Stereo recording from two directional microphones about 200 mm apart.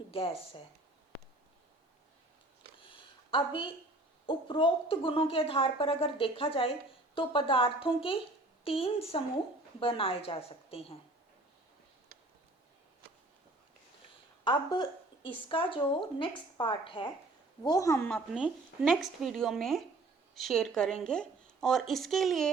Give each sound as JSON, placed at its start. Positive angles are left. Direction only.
{"t": 0.1, "sound": "speech", "side_deg": 25}
{"t": 2.7, "sound": "a sound", "side_deg": 25}
{"t": 4.3, "sound": "speech", "side_deg": 25}
{"t": 14.4, "sound": "a woman's voice", "side_deg": 25}
{"t": 18.3, "sound": "speech", "side_deg": -5}